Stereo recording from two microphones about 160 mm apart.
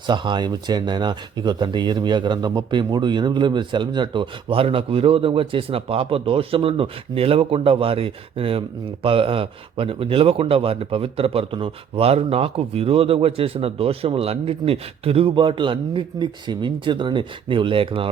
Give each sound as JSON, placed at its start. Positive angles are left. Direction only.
{"t": 0.1, "sound": "speech", "side_deg": -30}